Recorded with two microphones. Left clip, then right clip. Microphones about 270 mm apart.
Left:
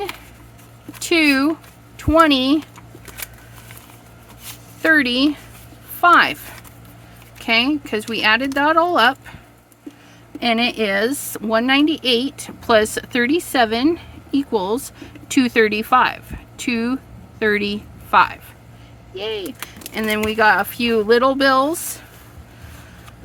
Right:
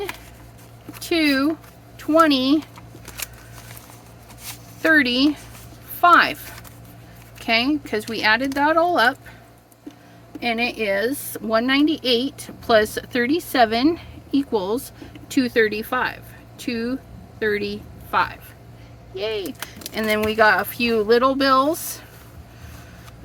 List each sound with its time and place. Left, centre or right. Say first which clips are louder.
1.0 s a woman's voice: left 4 dB; left
4.8 s a woman's voice: left 1 dB; centre
7.4 s a woman's voice: left 3 dB; centre
10.4 s speech: left 4 dB; left
11.3 s a woman's voice: left 3 dB; centre
19.1 s a woman's voice: even; centre